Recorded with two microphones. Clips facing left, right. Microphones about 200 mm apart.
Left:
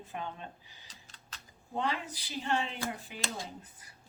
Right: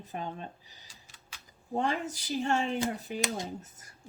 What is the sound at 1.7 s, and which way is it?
Speech, 45° right (ahead or behind).